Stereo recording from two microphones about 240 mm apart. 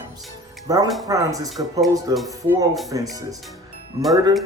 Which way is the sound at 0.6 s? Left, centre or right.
Centre.